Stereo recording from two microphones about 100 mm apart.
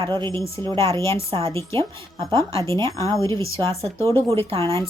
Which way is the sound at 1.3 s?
70° right (ahead or behind).